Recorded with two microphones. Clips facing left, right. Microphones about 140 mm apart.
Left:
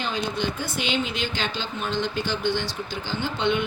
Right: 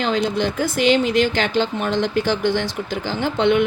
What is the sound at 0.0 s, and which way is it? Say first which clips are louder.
Speech: right 8 dB; 90° right.